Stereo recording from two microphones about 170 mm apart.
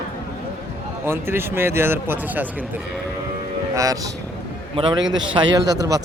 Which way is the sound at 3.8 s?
20° right (ahead or behind).